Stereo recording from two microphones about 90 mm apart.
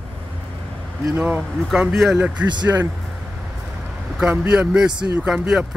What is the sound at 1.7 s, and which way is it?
Speech, 5° right (ahead or behind).